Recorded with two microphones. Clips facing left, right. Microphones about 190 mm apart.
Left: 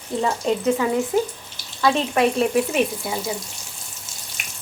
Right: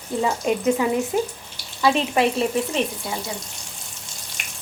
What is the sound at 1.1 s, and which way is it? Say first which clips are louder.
Speech: left 2 dB; 20° right (ahead or behind).